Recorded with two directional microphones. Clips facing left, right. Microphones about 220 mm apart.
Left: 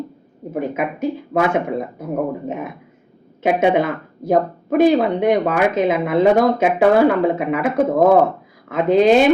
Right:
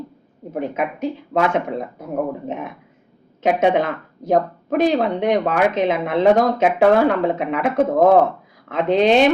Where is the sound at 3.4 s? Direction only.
10° left (ahead or behind).